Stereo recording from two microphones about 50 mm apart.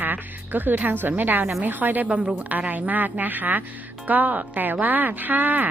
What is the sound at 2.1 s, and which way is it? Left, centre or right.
Speech, right.